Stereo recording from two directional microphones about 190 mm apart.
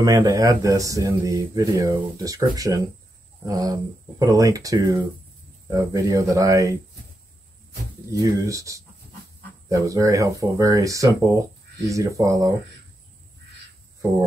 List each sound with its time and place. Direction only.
0.0 s speech: 20° right (ahead or behind)
8.1 s speech: 20° right (ahead or behind)